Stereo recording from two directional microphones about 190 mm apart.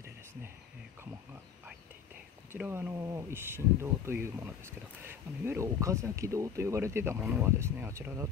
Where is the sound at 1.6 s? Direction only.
5° right (ahead or behind).